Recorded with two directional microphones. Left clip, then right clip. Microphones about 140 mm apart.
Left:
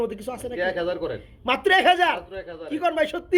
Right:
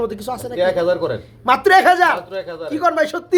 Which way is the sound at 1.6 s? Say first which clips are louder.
Right 6 dB; 35° left (ahead or behind).